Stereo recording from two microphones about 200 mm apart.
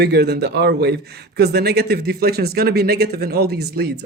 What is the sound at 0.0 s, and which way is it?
Speech, 55° right (ahead or behind).